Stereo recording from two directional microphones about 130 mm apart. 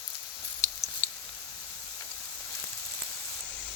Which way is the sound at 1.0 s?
60° left (ahead or behind).